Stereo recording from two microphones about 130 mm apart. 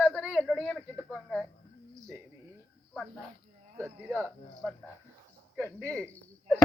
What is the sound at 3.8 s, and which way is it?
Speech, 15° right (ahead or behind).